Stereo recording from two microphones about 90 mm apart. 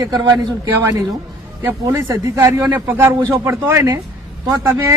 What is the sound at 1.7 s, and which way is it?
Speech, 30° right (ahead or behind).